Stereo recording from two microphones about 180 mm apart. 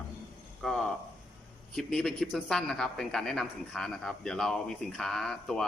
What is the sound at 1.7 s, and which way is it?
Speech, 5° left (ahead or behind).